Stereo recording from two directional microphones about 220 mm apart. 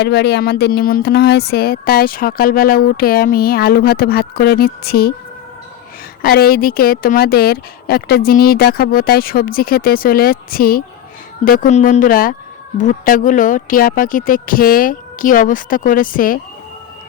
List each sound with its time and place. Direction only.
0.0 s speech: 50° left (ahead or behind)
6.2 s speech: 45° left (ahead or behind)